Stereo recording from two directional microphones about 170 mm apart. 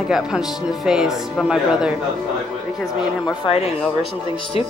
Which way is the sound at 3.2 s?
30° left (ahead or behind).